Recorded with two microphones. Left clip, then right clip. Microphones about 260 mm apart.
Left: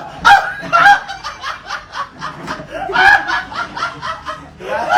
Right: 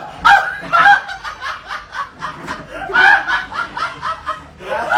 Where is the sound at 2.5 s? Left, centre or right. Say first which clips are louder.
Right 1 dB; left.